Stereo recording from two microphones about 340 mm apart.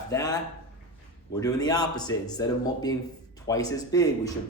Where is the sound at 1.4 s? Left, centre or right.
Centre.